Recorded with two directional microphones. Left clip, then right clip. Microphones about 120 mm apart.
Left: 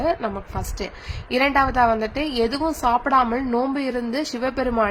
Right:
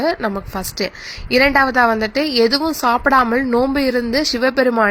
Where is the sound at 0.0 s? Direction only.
35° right (ahead or behind).